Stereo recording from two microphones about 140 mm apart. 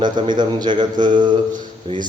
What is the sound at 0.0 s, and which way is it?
Mantra, 30° right (ahead or behind).